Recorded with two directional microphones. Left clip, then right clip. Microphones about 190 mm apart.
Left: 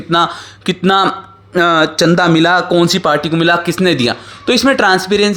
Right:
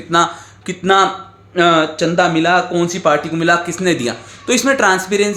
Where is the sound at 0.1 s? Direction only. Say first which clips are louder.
Left 1 dB; 45° left (ahead or behind).